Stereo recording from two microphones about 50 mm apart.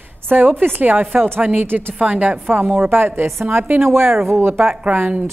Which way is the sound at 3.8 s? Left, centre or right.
Right.